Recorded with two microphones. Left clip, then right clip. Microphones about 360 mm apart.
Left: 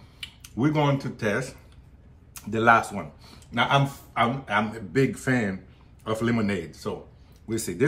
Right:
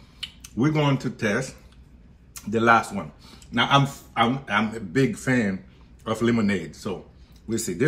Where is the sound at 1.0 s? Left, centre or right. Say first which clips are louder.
Right 2 dB; centre.